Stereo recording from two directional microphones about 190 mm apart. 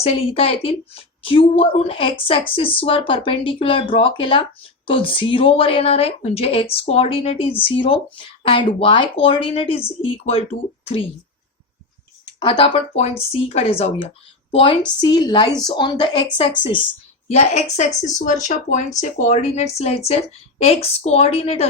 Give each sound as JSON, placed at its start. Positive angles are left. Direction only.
{"t": 0.0, "sound": "a woman's voice", "side_deg": 30}
{"t": 12.4, "sound": "a woman's voice", "side_deg": 25}